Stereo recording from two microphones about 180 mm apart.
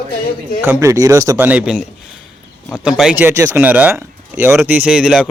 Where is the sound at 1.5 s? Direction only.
5° right (ahead or behind).